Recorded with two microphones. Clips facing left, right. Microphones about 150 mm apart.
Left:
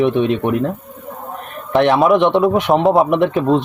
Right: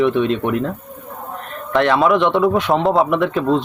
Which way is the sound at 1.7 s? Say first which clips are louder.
Left 2 dB; 20° left (ahead or behind).